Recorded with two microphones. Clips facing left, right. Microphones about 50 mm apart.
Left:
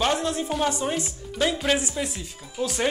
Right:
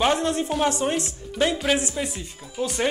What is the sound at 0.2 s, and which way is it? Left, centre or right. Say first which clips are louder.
Speech: right 3 dB; right.